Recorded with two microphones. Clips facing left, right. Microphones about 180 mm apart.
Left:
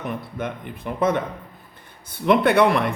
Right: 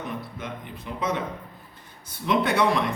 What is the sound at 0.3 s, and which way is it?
Speech, 55° left (ahead or behind).